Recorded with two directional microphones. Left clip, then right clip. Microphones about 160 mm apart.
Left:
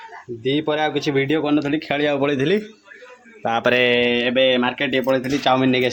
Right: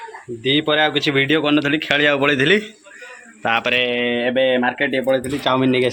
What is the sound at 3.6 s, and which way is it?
Mantra, 55° left (ahead or behind).